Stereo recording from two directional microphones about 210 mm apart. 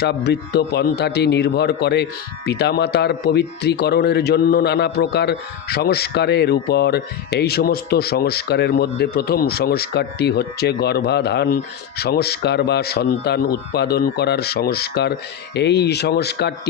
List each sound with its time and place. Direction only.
0.0 s speech: 50° left (ahead or behind)